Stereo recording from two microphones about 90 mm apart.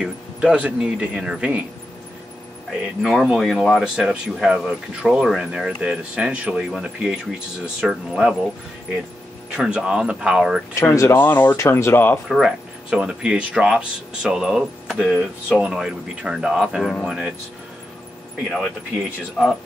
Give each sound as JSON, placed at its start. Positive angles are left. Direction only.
{"t": 0.0, "sound": "speech", "side_deg": -10}
{"t": 3.0, "sound": "speech", "side_deg": 0}
{"t": 3.8, "sound": "speech", "side_deg": -10}
{"t": 9.6, "sound": "speech", "side_deg": -10}
{"t": 10.7, "sound": "speech", "side_deg": 35}
{"t": 12.3, "sound": "speech", "side_deg": -5}
{"t": 19.4, "sound": "speech", "side_deg": -10}